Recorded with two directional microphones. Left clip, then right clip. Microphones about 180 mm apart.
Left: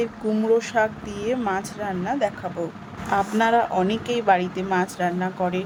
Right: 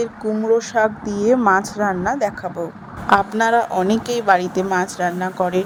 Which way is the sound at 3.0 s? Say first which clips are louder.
Right 5 dB; 30° right (ahead or behind).